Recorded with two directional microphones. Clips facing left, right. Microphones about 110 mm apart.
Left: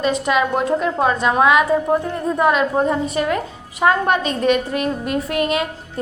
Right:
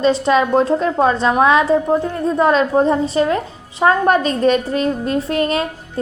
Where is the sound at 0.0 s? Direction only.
30° right (ahead or behind).